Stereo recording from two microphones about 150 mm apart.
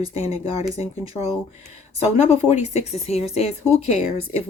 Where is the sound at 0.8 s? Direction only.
45° left (ahead or behind).